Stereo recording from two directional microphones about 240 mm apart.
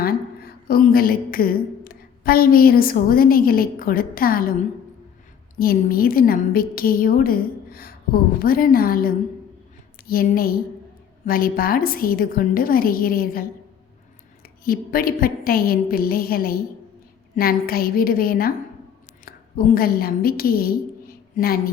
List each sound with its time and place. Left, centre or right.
0.0 s a woman's voice: left
5.5 s a woman's voice: left
14.4 s a woman's voice: left